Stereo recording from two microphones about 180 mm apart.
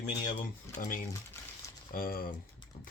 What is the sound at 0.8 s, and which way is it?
Speech, 55° left (ahead or behind).